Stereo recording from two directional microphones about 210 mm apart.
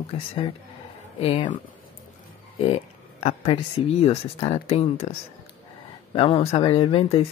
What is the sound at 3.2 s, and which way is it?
Speech, 30° left (ahead or behind).